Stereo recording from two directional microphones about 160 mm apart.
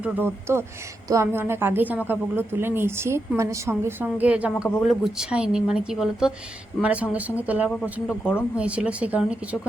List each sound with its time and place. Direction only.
0.0 s a woman's voice: 15° right (ahead or behind)
7.8 s speech: 5° left (ahead or behind)
8.5 s a woman's voice: 5° right (ahead or behind)